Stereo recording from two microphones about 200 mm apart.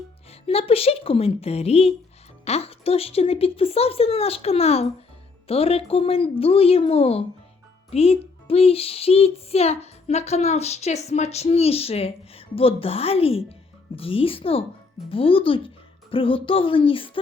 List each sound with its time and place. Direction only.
0.3 s speech: 30° left (ahead or behind)